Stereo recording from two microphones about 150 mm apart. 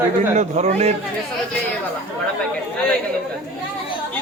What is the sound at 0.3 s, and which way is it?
Speech, 50° right (ahead or behind).